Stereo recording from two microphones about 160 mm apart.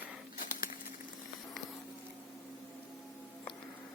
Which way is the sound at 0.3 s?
60° left (ahead or behind).